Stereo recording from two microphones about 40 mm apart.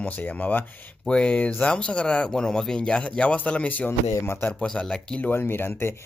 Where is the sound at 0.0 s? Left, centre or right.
Left.